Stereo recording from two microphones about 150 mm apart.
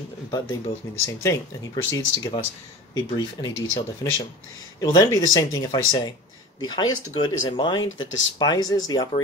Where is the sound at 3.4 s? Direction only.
25° left (ahead or behind).